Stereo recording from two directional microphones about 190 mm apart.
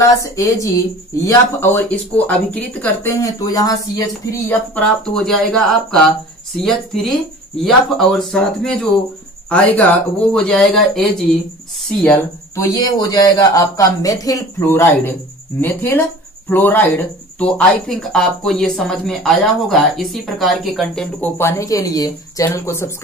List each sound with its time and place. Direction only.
0.2 s speech: 15° left (ahead or behind)